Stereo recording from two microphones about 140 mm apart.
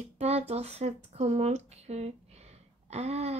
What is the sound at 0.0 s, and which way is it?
Speech, 50° right (ahead or behind).